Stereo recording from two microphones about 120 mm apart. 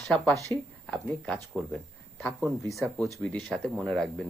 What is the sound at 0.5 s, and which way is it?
Speech, 45° right (ahead or behind).